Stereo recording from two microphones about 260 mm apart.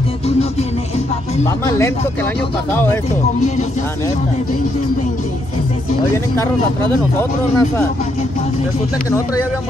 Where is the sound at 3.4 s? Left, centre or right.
Left.